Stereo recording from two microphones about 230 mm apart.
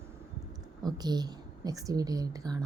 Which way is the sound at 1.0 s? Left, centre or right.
Centre.